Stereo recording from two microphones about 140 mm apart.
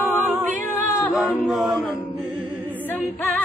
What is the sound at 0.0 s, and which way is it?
A capella, 10° right (ahead or behind).